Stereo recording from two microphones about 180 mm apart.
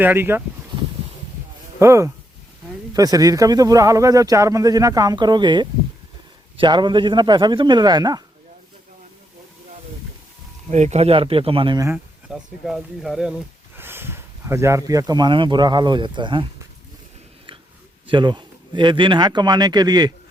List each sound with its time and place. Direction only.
0.0 s speech: 10° right (ahead or behind)
1.8 s speech: 15° right (ahead or behind)
10.7 s speech: 40° right (ahead or behind)
11.9 s speech: 5° right (ahead or behind)
13.7 s speech: 10° right (ahead or behind)
18.1 s speech: 25° right (ahead or behind)